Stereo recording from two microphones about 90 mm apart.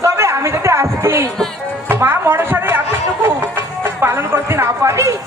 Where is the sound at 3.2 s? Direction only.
25° right (ahead or behind).